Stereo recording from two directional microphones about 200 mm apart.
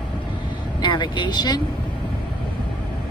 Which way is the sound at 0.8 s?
20° left (ahead or behind).